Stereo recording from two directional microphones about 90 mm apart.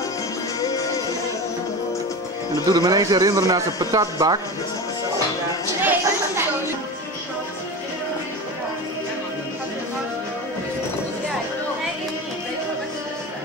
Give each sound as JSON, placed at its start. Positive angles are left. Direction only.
{"t": 0.6, "sound": "music", "side_deg": 40}
{"t": 2.5, "sound": "speech", "side_deg": -45}
{"t": 5.8, "sound": "chatter", "side_deg": -20}